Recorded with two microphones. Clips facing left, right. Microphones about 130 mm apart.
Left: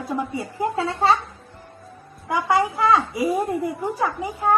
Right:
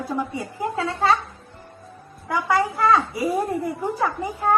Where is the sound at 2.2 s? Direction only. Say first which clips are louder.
Left 1 dB; 20° left (ahead or behind).